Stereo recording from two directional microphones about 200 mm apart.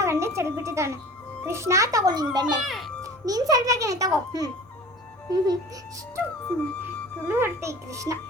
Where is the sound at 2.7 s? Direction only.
Centre (ahead or behind).